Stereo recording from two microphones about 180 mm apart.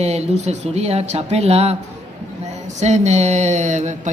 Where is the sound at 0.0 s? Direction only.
40° right (ahead or behind).